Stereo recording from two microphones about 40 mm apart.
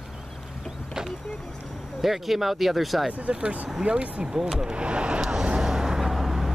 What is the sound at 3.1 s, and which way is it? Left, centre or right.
Speech, right.